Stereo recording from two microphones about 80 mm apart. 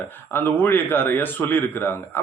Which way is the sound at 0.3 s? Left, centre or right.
Left.